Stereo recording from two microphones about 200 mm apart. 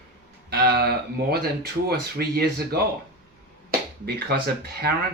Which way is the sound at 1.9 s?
50° right (ahead or behind).